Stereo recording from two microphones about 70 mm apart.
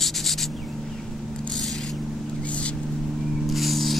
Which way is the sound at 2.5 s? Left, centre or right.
Centre.